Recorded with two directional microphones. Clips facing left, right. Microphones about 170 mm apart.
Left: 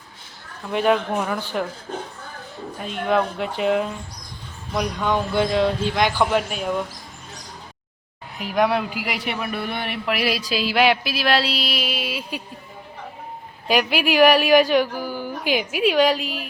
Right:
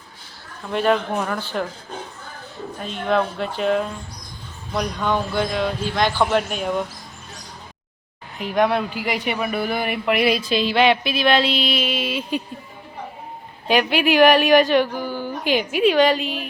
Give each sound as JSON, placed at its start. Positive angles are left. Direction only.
{"t": 0.7, "sound": "speech", "side_deg": 10}
{"t": 2.7, "sound": "speech", "side_deg": 10}
{"t": 5.3, "sound": "speech", "side_deg": 25}
{"t": 6.1, "sound": "a woman's voice", "side_deg": 10}
{"t": 8.4, "sound": "a woman's voice", "side_deg": 5}
{"t": 13.7, "sound": "a woman's voice", "side_deg": 5}